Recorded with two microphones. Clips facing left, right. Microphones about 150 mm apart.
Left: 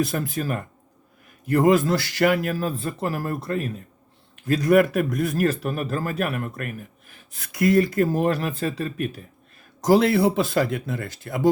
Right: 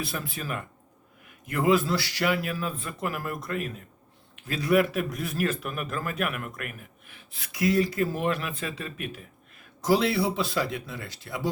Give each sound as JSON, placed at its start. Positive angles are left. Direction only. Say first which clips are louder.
{"t": 0.0, "sound": "a man's voice", "louder": "left 9 dB", "side_deg": 45}
{"t": 4.4, "sound": "a man's voice", "louder": "left 6 dB", "side_deg": 45}